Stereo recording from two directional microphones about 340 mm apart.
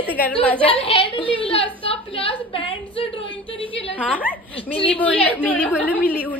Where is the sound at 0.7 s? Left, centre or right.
Centre.